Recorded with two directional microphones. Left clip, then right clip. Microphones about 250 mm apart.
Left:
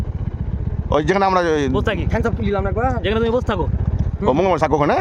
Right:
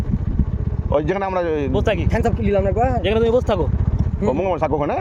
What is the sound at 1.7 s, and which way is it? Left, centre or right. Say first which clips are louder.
Speech: right 1 dB; centre.